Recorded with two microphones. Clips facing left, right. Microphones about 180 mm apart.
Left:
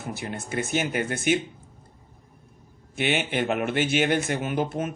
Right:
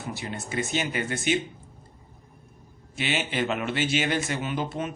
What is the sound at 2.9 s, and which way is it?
Speech, 55° left (ahead or behind).